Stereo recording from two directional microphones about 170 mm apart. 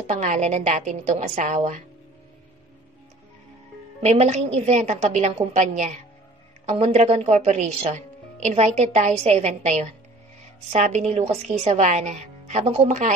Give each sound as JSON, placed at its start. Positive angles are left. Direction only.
{"t": 0.0, "sound": "speech", "side_deg": -45}
{"t": 4.0, "sound": "a woman's voice", "side_deg": -40}